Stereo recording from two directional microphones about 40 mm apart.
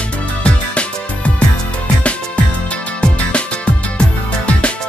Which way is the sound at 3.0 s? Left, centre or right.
Left.